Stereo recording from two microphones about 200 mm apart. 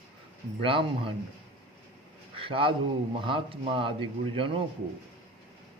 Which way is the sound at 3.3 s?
25° right (ahead or behind).